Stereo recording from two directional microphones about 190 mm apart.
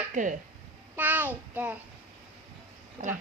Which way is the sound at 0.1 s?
45° right (ahead or behind).